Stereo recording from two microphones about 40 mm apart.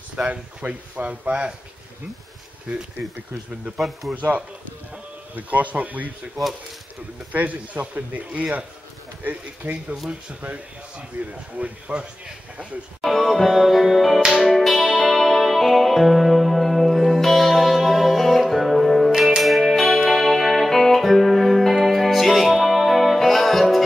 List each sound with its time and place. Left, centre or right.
0.3 s speech: right
3.7 s speech: centre
4.1 s speech: right
7.3 s speech: right
13.0 s music: centre